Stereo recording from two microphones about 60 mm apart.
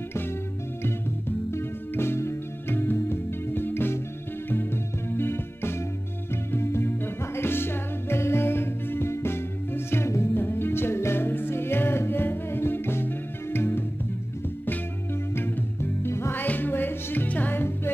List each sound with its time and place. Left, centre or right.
1.5 s music: left
5.1 s music: left
15.3 s music: left
16.3 s music: left